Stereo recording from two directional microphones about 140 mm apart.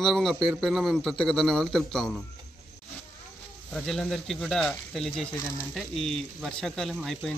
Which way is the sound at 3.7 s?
5° left (ahead or behind).